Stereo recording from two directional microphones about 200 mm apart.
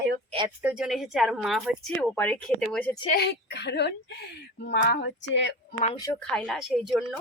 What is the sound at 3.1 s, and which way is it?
Speech, 55° left (ahead or behind).